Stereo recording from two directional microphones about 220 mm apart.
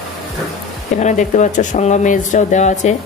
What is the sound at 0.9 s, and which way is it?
Speech, 35° left (ahead or behind).